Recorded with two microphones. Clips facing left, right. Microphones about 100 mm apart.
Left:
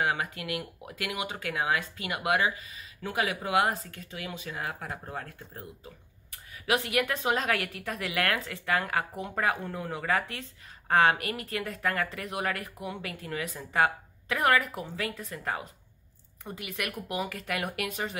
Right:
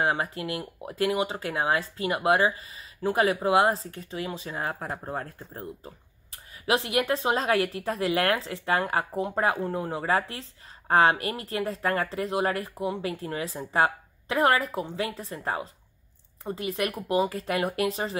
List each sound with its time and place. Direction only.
0.0 s speech: 30° right (ahead or behind)